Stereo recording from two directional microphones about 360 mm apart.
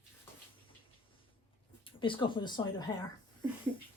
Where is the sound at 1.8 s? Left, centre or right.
Centre.